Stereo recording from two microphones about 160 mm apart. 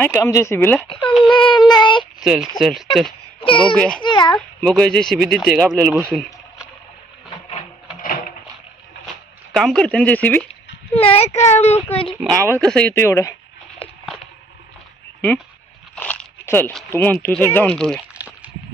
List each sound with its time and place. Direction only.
0.0 s speech: 15° left (ahead or behind)
0.8 s speech: 30° left (ahead or behind)
1.3 s child singing: 30° left (ahead or behind)
2.1 s a sound: 5° right (ahead or behind)
2.6 s speech: centre (ahead or behind)
3.3 s speech: 30° left (ahead or behind)
4.0 s child singing: 30° left (ahead or behind)
4.4 s speech: 5° left (ahead or behind)
8.0 s a sound: 60° left (ahead or behind)
9.0 s a sound: centre (ahead or behind)
10.5 s speech: 35° left (ahead or behind)
12.4 s speech: 5° left (ahead or behind)
15.9 s speech: 10° left (ahead or behind)
18.1 s a sound: 10° right (ahead or behind)